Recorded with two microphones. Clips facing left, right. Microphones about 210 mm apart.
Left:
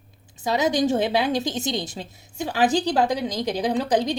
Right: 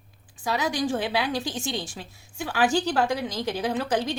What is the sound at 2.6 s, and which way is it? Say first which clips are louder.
Speech: left 2 dB; 35° left (ahead or behind).